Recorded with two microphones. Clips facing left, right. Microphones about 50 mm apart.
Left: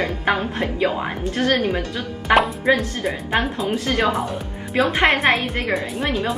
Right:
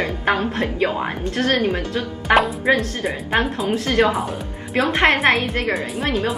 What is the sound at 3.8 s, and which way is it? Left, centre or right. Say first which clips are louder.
Speech: right 3 dB; right.